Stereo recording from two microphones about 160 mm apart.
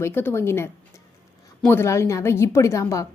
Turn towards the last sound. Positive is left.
turn(degrees=20)  # may be behind; listen again after turning